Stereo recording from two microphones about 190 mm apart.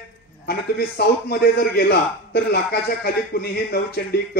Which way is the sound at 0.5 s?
55° left (ahead or behind).